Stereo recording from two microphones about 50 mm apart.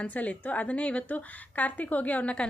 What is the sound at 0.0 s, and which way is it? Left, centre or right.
A woman's voice, left.